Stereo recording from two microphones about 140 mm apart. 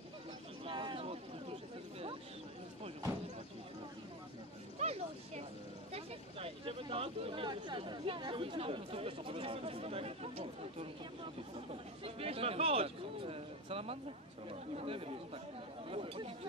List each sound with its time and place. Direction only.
0.7 s vehicle: 35° right (ahead or behind)
4.7 s a sound: 50° right (ahead or behind)
14.5 s speech: 45° right (ahead or behind)